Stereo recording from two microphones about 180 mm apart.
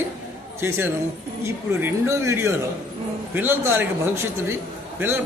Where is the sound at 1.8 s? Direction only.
15° right (ahead or behind).